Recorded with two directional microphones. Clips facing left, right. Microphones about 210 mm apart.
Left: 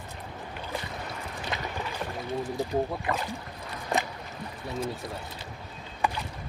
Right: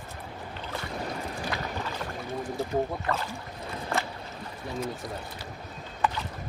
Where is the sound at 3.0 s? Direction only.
15° left (ahead or behind).